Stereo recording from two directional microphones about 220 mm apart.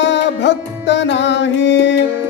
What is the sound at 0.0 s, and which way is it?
Music, 50° left (ahead or behind).